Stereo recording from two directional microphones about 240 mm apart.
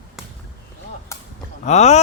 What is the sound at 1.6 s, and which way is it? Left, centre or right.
Speech, left.